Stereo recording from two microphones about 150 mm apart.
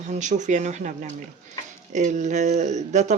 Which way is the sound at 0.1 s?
55° right (ahead or behind).